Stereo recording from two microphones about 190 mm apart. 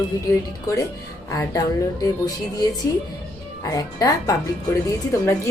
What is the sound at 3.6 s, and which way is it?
Speech, 20° left (ahead or behind).